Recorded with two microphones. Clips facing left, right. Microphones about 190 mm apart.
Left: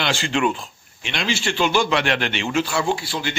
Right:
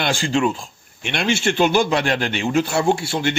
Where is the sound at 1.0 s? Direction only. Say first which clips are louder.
Right 4 dB; 55° right (ahead or behind).